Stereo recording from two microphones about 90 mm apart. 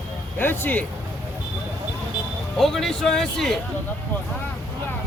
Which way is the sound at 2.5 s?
5° left (ahead or behind).